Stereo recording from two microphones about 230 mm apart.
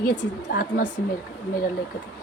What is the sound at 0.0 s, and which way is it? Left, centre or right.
Speech, left.